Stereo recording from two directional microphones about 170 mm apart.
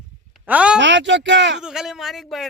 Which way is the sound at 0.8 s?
90° right.